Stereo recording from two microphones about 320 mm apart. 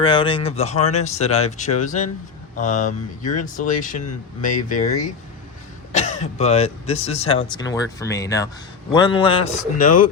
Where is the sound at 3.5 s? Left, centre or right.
Left.